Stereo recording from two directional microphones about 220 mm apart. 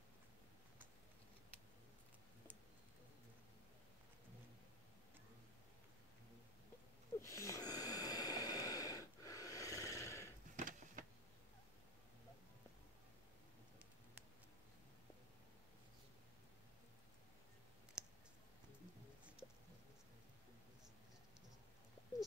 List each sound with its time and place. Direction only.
7.2 s snort: 15° left (ahead or behind)
10.5 s a sound: 35° right (ahead or behind)
18.0 s clicking: 5° right (ahead or behind)